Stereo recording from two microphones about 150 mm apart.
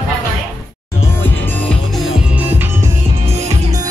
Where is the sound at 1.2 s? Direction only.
10° left (ahead or behind).